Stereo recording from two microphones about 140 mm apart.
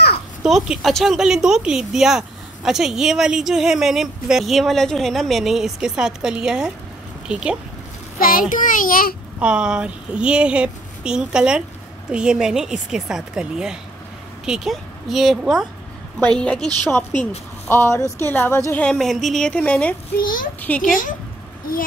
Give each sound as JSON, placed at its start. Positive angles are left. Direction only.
{"t": 0.4, "sound": "speech", "side_deg": -5}
{"t": 8.2, "sound": "a child's voice", "side_deg": 90}
{"t": 9.4, "sound": "a woman's voice", "side_deg": -5}
{"t": 17.6, "sound": "speech", "side_deg": 15}
{"t": 20.2, "sound": "a child's voice", "side_deg": 80}
{"t": 20.6, "sound": "speech", "side_deg": 10}